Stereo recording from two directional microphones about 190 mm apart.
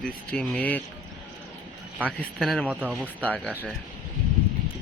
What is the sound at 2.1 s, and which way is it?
Speech, centre (ahead or behind).